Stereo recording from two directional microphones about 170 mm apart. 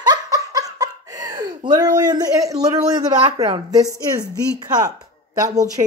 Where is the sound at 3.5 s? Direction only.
20° right (ahead or behind).